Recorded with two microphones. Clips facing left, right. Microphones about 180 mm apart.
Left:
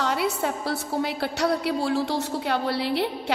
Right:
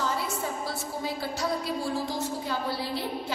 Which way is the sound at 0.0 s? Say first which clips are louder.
Left 5 dB; 70° left (ahead or behind).